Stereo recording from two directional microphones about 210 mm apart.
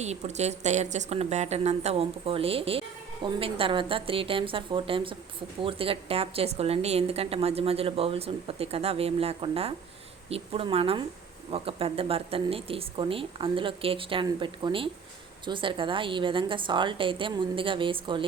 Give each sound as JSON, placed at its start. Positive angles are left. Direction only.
{"t": 0.0, "sound": "a woman's voice", "side_deg": -30}